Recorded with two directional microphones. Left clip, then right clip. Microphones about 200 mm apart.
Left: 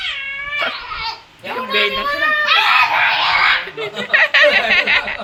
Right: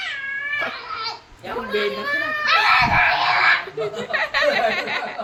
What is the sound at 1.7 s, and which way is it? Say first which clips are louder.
Speech: left 7 dB; 5° right (ahead or behind).